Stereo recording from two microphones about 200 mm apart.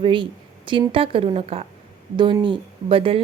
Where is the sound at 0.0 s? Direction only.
25° right (ahead or behind).